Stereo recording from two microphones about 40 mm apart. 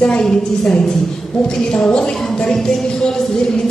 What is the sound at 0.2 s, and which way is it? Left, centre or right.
A man's voice, centre.